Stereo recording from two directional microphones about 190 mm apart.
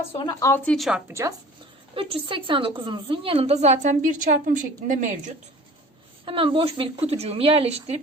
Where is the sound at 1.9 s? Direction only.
30° right (ahead or behind).